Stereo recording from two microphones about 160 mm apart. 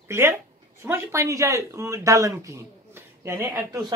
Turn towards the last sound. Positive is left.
turn(degrees=-15)  # may be behind; listen again after turning